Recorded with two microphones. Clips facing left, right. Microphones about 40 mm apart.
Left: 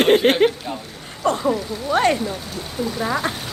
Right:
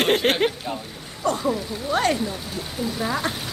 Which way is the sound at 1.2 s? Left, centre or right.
Left.